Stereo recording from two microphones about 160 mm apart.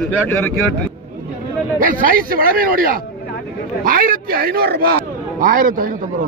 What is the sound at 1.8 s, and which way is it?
A man's voice, 60° right (ahead or behind).